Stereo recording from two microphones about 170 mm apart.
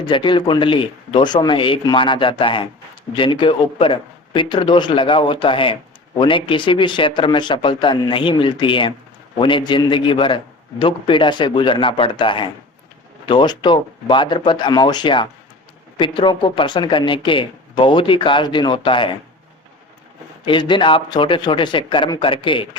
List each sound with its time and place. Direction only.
0.0 s speech: 30° left (ahead or behind)
20.4 s speech: 25° left (ahead or behind)